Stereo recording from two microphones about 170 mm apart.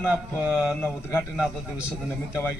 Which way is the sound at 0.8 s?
15° left (ahead or behind).